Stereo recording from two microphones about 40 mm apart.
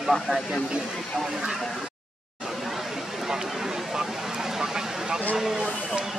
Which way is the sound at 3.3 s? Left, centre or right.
Centre.